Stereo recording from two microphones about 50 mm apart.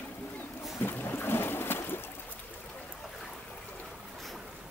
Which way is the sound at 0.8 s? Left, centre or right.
Left.